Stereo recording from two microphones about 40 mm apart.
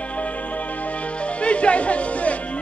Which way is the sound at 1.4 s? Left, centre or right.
Left.